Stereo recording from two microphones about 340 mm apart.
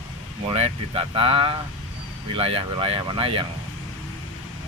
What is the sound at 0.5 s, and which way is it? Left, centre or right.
Speech, centre.